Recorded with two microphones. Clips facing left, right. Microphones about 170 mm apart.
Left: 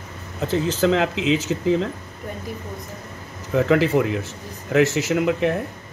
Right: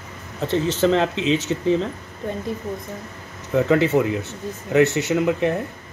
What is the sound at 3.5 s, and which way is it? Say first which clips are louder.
Speech: even; centre (ahead or behind).